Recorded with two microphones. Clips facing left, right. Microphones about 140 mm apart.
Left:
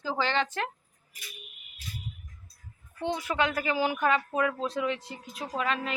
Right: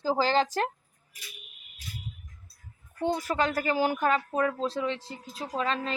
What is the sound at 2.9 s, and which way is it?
Speech, 40° right (ahead or behind).